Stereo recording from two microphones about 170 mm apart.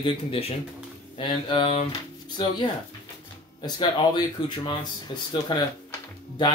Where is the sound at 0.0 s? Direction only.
35° left (ahead or behind).